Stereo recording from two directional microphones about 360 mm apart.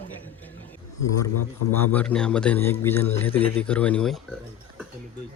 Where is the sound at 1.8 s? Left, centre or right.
Centre.